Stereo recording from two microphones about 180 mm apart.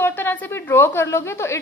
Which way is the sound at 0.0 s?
10° left (ahead or behind).